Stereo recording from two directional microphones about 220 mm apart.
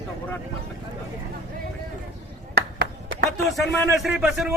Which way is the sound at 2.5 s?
45° right (ahead or behind).